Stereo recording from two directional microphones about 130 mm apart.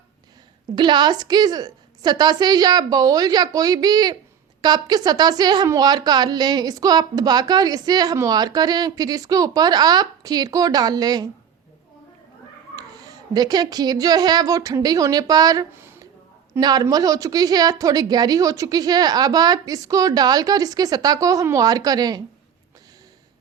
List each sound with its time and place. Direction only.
0.8 s a woman's voice: 35° right (ahead or behind)
12.7 s a child's voice: 30° right (ahead or behind)
15.7 s a sound: 20° right (ahead or behind)
16.6 s a woman's voice: 30° right (ahead or behind)